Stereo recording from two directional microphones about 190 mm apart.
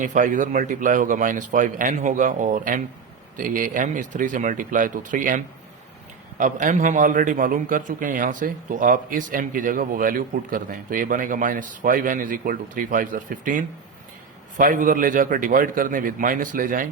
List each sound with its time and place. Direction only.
0.0 s a man's voice: 40° right (ahead or behind)
6.4 s a man's voice: 45° right (ahead or behind)